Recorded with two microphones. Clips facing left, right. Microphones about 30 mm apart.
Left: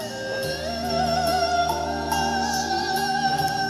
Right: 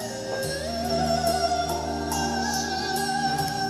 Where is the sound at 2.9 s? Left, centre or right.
Left.